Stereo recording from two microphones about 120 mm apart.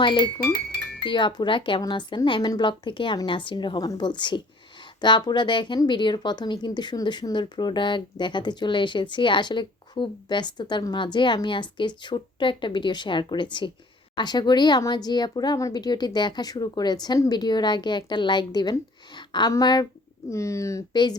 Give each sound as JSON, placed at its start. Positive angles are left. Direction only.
{"t": 0.0, "sound": "a woman's voice", "side_deg": 40}
{"t": 20.9, "sound": "a woman's voice", "side_deg": 40}